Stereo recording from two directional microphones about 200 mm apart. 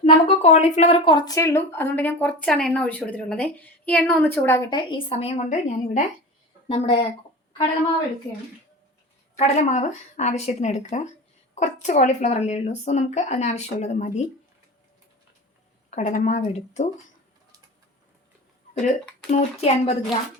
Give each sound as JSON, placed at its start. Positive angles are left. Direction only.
{"t": 0.0, "sound": "speech", "side_deg": 30}
{"t": 9.4, "sound": "speech", "side_deg": 35}
{"t": 15.9, "sound": "speech", "side_deg": 35}
{"t": 19.3, "sound": "speech", "side_deg": 35}